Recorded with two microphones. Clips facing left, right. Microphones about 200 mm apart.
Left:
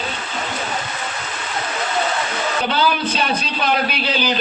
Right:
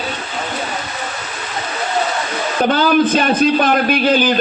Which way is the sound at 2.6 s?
50° right (ahead or behind).